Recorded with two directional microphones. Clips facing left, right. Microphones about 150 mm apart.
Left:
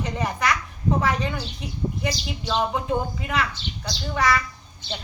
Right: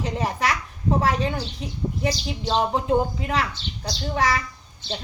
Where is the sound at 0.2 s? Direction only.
30° right (ahead or behind).